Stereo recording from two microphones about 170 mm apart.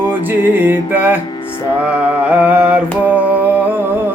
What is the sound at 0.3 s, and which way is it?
Music, 10° right (ahead or behind).